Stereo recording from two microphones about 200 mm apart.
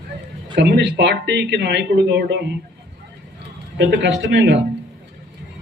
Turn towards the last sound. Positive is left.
turn(degrees=-60)  # may be behind; listen again after turning